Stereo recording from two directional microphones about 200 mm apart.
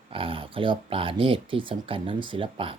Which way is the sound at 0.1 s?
25° right (ahead or behind).